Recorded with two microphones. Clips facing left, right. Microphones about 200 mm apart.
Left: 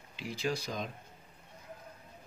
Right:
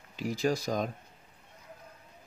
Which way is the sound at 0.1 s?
45° right (ahead or behind).